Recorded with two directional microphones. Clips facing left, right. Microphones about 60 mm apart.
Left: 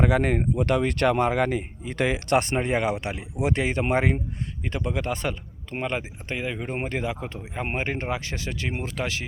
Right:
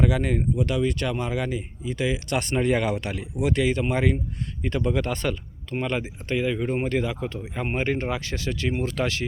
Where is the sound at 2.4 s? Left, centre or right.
Left.